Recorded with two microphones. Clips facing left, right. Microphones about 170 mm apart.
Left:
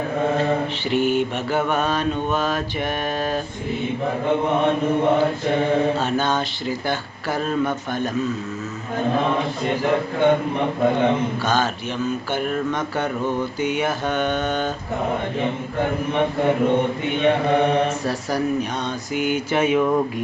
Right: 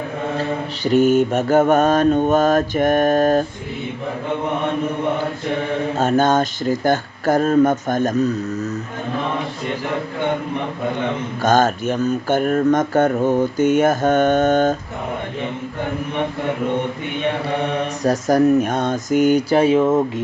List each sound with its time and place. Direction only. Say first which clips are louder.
0.9 s speech: right 7 dB; 45° right (ahead or behind)
6.0 s speech: right 6 dB; 45° right (ahead or behind)
11.4 s speech: right 6 dB; 45° right (ahead or behind)
18.0 s speech: right 8 dB; 45° right (ahead or behind); by 20.2 s 25° right (ahead or behind)